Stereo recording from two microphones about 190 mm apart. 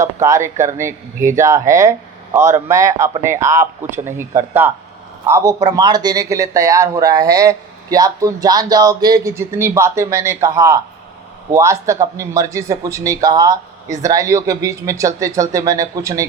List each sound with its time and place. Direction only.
0.0 s a man's voice: 15° right (ahead or behind)